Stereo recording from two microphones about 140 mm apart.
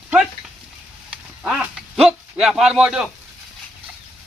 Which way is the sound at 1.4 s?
Centre (ahead or behind).